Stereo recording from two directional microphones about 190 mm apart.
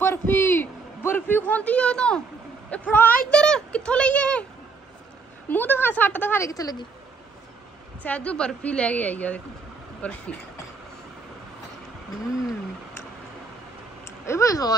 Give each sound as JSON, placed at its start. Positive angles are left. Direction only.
{"t": 0.0, "sound": "a sound", "side_deg": 10}
{"t": 2.7, "sound": "a woman's voice", "side_deg": 10}
{"t": 5.5, "sound": "a woman's voice", "side_deg": 10}
{"t": 8.0, "sound": "a woman's voice", "side_deg": 5}
{"t": 14.0, "sound": "speech", "side_deg": 15}